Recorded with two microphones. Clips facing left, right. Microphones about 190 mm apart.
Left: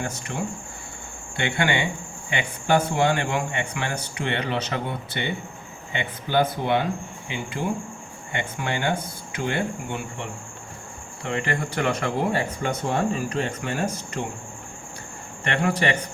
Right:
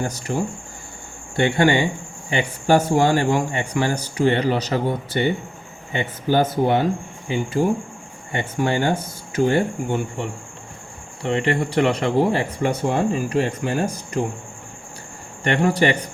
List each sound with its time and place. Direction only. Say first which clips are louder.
0.0 s a man's voice: right 5 dB; 35° right (ahead or behind)
11.2 s a man's voice: right 6 dB; 30° right (ahead or behind)
15.4 s a man's voice: right 5 dB; 35° right (ahead or behind)